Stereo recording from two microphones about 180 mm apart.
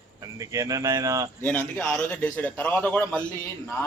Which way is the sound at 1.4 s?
5° left (ahead or behind).